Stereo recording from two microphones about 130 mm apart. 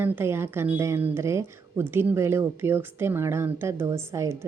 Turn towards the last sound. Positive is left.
turn(degrees=-20)  # may be behind; listen again after turning